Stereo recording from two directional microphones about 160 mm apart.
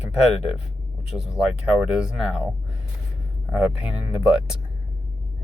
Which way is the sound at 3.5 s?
5° right (ahead or behind).